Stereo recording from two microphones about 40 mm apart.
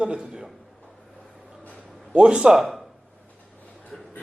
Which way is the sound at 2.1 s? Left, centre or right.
Right.